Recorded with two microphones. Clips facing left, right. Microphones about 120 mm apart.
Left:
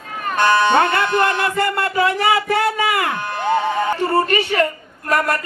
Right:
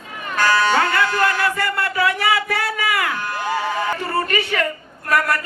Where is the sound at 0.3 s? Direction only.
25° left (ahead or behind).